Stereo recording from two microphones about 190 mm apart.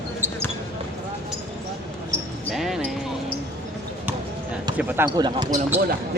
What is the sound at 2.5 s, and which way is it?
Basketball bounce, centre (ahead or behind).